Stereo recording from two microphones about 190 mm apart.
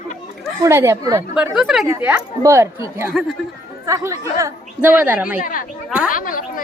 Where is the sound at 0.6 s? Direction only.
15° right (ahead or behind).